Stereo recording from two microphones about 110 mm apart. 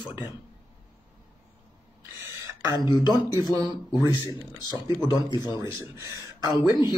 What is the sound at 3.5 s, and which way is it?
Speech, 35° right (ahead or behind).